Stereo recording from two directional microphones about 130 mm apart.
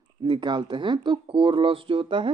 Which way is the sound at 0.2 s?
35° right (ahead or behind).